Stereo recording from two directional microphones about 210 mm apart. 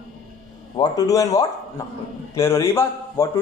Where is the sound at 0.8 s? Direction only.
15° left (ahead or behind).